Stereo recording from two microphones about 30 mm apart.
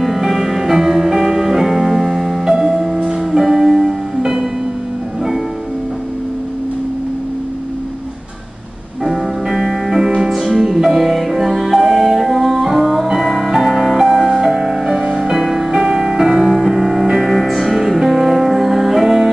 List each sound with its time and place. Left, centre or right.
0.0 s music: centre
9.0 s music: centre
10.5 s music: centre
14.0 s music: centre
14.4 s music: centre